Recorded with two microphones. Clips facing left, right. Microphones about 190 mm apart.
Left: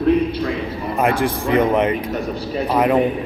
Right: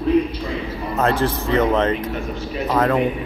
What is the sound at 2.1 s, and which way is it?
Speech, 35° left (ahead or behind).